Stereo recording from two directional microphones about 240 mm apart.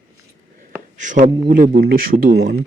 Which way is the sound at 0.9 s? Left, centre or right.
Right.